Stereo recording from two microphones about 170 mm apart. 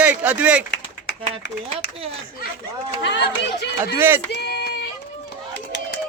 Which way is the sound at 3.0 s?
85° left.